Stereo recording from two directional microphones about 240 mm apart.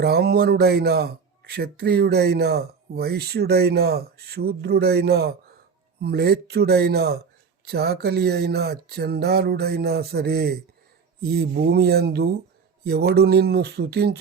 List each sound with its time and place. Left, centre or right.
0.0 s speech: right